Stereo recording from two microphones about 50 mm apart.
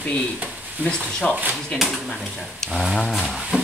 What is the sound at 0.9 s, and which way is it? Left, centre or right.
Speech, centre.